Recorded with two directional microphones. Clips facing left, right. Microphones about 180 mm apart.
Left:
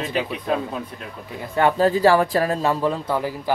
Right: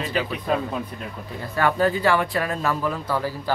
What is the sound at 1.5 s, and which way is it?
Speech, 25° left (ahead or behind).